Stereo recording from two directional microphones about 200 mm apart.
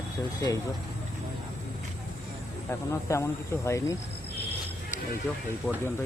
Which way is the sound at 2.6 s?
15° left (ahead or behind).